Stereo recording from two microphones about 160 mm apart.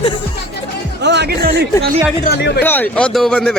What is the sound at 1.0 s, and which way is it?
Music, 90° right.